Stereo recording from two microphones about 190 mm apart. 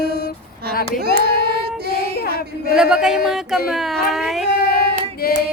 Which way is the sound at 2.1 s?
55° left (ahead or behind).